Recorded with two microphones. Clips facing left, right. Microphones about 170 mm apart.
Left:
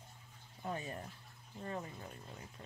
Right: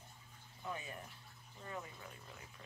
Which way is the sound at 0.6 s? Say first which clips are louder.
Left 4 dB; 40° left (ahead or behind).